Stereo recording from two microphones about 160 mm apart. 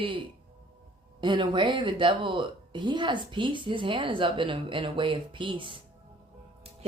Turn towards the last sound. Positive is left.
turn(degrees=-30)  # may be behind; listen again after turning